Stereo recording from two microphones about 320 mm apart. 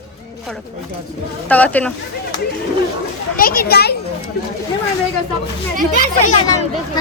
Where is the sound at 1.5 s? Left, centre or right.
Centre.